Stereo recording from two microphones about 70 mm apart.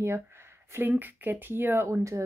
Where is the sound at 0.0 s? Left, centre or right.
Right.